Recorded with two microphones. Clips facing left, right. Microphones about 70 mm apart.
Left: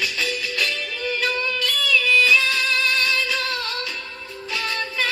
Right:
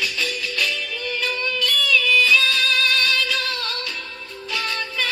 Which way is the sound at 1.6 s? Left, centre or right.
Left.